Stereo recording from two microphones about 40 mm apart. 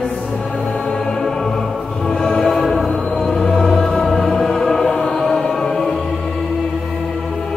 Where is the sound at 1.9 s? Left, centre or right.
Centre.